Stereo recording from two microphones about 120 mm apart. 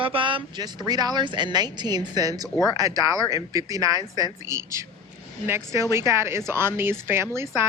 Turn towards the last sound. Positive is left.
turn(degrees=-20)  # may be behind; listen again after turning